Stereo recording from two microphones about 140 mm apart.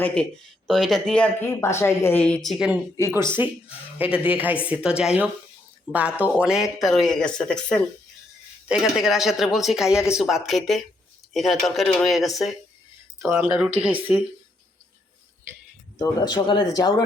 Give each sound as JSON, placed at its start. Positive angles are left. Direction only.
{"t": 0.0, "sound": "a woman's voice", "side_deg": 10}
{"t": 1.6, "sound": "a woman's voice", "side_deg": 20}
{"t": 13.2, "sound": "speech", "side_deg": -15}
{"t": 16.0, "sound": "speech", "side_deg": 30}